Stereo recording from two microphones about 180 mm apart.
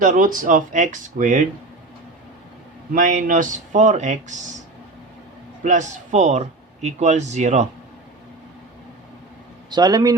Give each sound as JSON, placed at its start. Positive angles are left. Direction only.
{"t": 0.0, "sound": "speech", "side_deg": -50}
{"t": 2.9, "sound": "speech", "side_deg": -45}
{"t": 5.6, "sound": "speech", "side_deg": -40}
{"t": 9.6, "sound": "a man's voice", "side_deg": -20}